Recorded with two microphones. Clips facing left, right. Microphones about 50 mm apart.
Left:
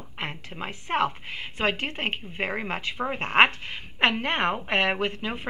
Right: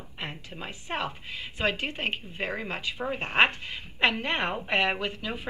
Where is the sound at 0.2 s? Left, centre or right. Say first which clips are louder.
Left 4 dB; left.